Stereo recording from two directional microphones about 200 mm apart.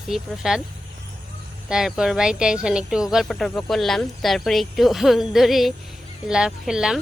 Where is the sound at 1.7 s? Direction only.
5° right (ahead or behind).